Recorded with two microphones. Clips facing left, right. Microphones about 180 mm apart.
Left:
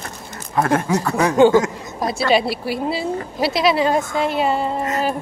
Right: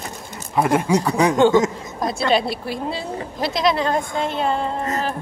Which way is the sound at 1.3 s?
5° left (ahead or behind).